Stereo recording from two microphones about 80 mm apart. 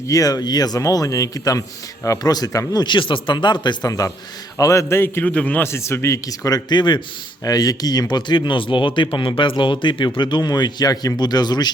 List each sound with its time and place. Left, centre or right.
0.1 s speech: left
2.8 s speech: left
4.5 s speech: left
5.2 s a man's voice: centre
5.6 s speech: left
6.7 s speech: left
7.4 s speech: left